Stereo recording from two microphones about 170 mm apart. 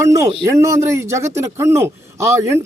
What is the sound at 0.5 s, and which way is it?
A man's voice, 20° right (ahead or behind).